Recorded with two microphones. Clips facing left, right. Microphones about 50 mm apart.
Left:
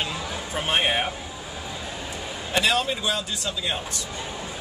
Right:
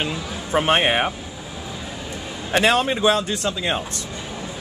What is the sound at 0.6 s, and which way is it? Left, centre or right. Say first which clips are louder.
Speech: right 6 dB; right.